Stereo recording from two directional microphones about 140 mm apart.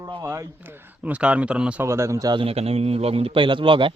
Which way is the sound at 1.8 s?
20° right (ahead or behind).